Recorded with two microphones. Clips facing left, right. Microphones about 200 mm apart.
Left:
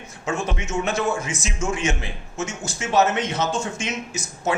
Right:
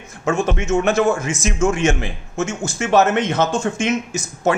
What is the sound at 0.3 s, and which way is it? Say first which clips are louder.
Speech: right 8 dB; 45° right (ahead or behind).